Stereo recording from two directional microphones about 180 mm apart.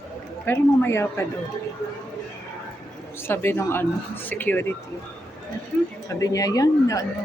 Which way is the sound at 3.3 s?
15° left (ahead or behind).